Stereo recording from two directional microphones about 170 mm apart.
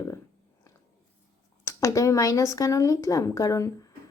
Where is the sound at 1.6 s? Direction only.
20° left (ahead or behind).